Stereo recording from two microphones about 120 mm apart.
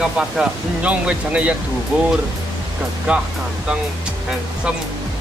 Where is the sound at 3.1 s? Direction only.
10° right (ahead or behind).